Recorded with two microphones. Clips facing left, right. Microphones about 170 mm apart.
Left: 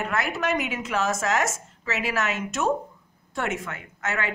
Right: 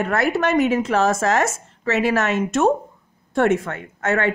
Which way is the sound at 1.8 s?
50° right (ahead or behind).